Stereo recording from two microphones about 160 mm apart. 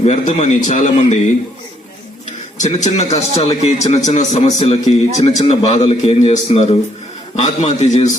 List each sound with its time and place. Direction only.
0.0 s a man's voice: 45° left (ahead or behind)
2.6 s a man's voice: 45° left (ahead or behind)